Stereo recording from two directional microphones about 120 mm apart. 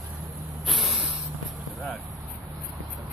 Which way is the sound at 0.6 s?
Centre (ahead or behind).